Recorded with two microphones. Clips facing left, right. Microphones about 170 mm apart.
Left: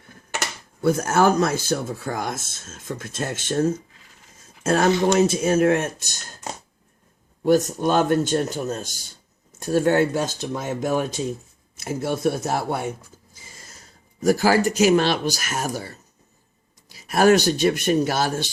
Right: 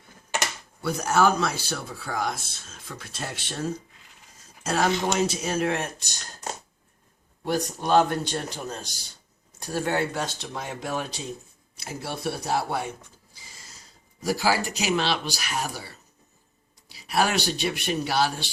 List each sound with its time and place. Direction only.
0.8 s speech: 50° left (ahead or behind)
7.8 s speech: 50° left (ahead or behind)